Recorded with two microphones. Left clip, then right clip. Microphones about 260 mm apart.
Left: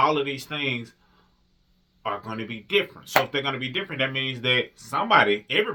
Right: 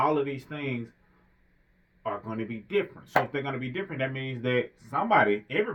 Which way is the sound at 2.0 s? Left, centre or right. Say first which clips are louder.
Left 3 dB; centre.